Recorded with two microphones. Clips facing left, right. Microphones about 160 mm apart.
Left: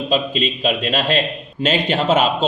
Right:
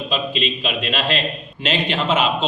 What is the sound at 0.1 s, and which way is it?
A man's voice, 40° left (ahead or behind).